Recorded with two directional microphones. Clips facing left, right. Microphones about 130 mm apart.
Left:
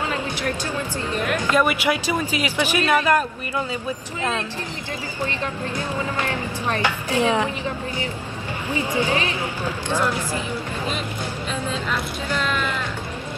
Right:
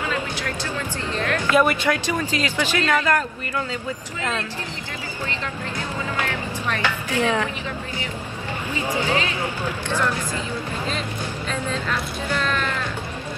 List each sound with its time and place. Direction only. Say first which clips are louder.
1.1 s speech: right 1 dB; 15° left (ahead or behind)
6.7 s speech: left 2 dB; 15° left (ahead or behind)
9.8 s speech: left 2 dB; 15° left (ahead or behind)
12.3 s speech: even; 10° left (ahead or behind)